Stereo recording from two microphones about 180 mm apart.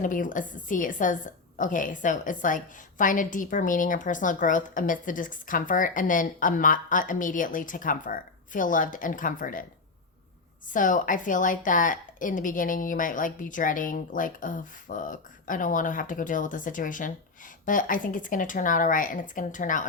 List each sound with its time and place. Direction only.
0.0 s a woman's voice: 45° left (ahead or behind)
10.7 s a woman's voice: 45° left (ahead or behind)